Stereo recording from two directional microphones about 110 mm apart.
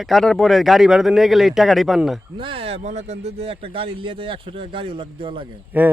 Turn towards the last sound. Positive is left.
turn(degrees=-15)  # may be behind; listen again after turning